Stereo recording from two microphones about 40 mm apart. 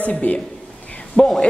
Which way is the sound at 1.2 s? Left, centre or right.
Left.